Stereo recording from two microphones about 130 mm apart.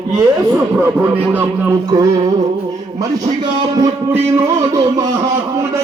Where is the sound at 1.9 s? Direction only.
30° right (ahead or behind).